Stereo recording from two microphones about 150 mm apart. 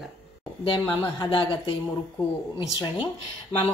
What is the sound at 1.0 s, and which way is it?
Speech, 30° left (ahead or behind).